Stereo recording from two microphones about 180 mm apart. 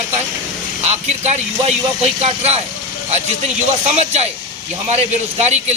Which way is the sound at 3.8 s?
35° right (ahead or behind).